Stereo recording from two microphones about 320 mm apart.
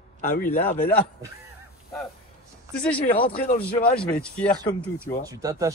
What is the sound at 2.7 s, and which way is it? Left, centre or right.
Speech, centre.